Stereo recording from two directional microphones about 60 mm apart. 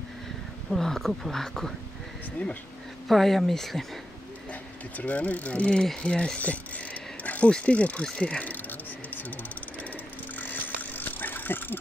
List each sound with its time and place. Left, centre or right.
0.7 s speech: centre
3.1 s speech: centre
4.5 s speech: left
6.0 s a sound: centre
7.5 s speech: left
10.4 s a sound: left